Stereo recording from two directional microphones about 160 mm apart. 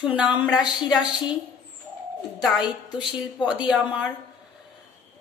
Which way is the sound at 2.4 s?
5° right (ahead or behind).